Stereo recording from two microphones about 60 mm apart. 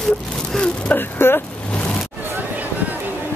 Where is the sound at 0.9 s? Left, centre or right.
Left.